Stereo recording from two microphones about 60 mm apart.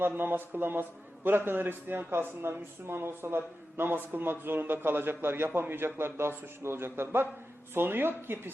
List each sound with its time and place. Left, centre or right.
0.0 s a man's voice: right